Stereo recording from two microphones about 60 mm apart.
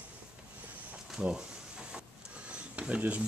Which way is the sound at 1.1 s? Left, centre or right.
Centre.